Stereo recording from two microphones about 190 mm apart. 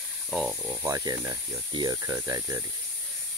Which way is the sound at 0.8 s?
20° right (ahead or behind).